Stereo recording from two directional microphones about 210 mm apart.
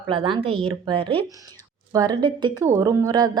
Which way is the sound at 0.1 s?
25° right (ahead or behind).